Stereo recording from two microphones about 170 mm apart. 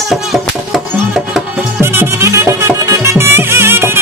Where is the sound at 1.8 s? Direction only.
15° right (ahead or behind).